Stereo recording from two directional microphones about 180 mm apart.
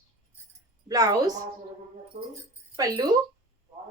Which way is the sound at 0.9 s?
20° right (ahead or behind).